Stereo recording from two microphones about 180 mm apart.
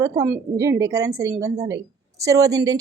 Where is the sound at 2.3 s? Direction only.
20° right (ahead or behind).